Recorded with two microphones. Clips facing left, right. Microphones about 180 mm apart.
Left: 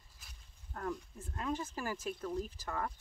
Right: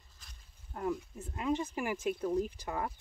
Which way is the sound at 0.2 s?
5° left (ahead or behind).